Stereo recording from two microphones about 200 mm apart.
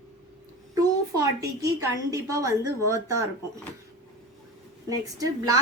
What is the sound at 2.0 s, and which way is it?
Speech, 15° right (ahead or behind).